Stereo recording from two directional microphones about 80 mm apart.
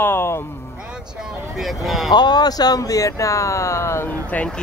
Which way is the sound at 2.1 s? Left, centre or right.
Left.